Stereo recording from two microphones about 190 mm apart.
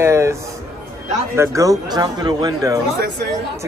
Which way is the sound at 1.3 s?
15° right (ahead or behind).